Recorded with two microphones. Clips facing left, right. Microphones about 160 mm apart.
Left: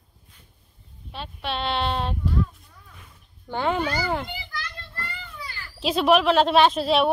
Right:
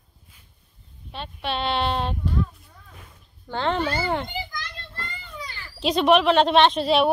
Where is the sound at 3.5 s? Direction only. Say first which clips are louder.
Even; 10° left (ahead or behind).